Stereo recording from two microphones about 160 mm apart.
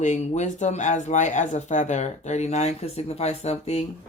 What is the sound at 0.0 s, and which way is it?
Speech, 50° left (ahead or behind).